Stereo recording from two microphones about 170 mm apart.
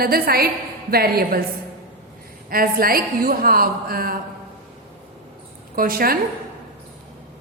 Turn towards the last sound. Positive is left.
turn(degrees=-60)  # may be behind; listen again after turning